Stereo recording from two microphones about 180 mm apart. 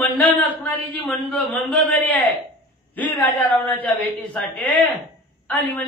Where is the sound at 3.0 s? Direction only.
10° left (ahead or behind).